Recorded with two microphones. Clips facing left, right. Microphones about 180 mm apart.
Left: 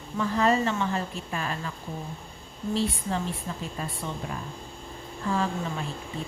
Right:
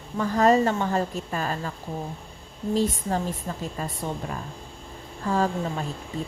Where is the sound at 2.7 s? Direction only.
45° right (ahead or behind).